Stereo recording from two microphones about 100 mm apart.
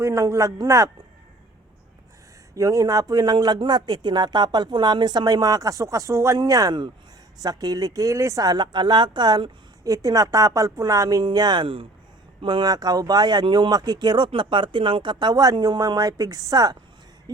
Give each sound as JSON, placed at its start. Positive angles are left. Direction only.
{"t": 0.0, "sound": "speech", "side_deg": -35}
{"t": 2.6, "sound": "speech", "side_deg": -35}
{"t": 17.3, "sound": "a sound", "side_deg": -40}